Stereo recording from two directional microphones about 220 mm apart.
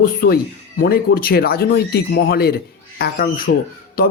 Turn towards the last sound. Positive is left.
turn(degrees=40)  # may be behind; listen again after turning